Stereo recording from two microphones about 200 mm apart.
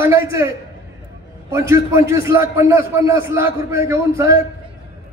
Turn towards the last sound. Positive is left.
turn(degrees=-15)  # may be behind; listen again after turning